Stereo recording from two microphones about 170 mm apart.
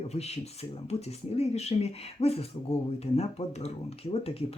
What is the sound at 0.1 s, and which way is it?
Speech, 40° left (ahead or behind).